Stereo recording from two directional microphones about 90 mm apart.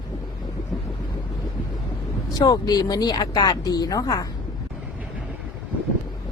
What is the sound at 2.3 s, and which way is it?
Speech, 45° left (ahead or behind).